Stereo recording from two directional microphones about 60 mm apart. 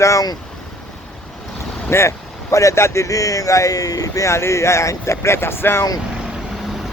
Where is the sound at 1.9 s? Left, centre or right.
Left.